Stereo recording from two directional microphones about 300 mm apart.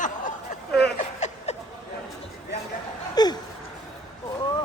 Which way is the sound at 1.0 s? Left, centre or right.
Left.